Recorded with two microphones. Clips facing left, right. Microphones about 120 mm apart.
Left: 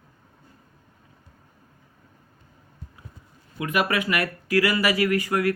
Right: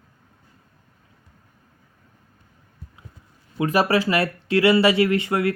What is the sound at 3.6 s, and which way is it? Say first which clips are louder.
Speech: right 5 dB; 30° right (ahead or behind).